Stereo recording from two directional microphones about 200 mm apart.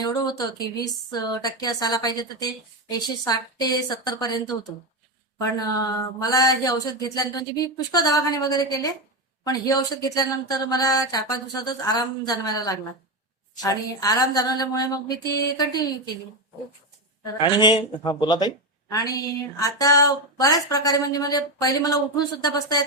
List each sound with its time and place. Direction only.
0.0 s speech: 20° left (ahead or behind)
17.3 s speech: 25° left (ahead or behind)